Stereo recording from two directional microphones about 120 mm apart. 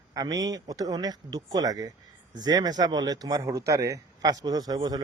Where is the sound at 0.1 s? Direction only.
30° right (ahead or behind).